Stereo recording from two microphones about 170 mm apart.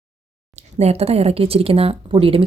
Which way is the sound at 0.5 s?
40° right (ahead or behind).